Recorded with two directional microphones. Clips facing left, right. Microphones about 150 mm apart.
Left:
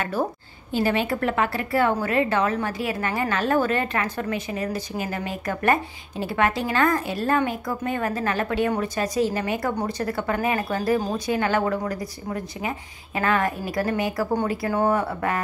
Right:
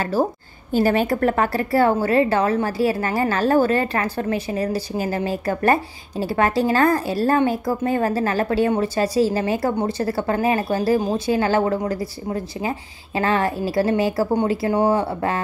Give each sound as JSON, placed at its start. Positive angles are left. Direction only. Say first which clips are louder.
{"t": 0.0, "sound": "a woman's voice", "louder": "right 5 dB", "side_deg": -35}